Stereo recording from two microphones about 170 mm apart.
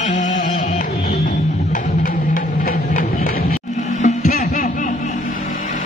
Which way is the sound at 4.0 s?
45° left (ahead or behind).